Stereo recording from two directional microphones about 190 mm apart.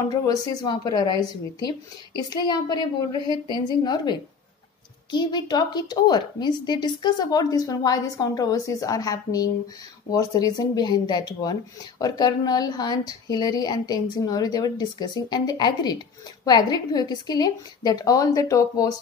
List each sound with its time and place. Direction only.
0.1 s a woman's voice: 20° left (ahead or behind)
2.1 s a woman's voice: 20° left (ahead or behind)